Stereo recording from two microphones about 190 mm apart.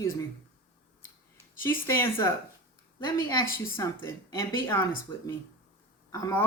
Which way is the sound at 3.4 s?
50° left (ahead or behind).